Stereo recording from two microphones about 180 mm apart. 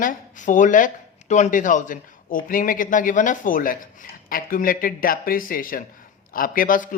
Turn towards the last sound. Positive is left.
turn(degrees=50)  # may be behind; listen again after turning